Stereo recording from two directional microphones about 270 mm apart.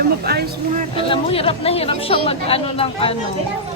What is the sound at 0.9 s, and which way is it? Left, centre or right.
A woman's voice, centre.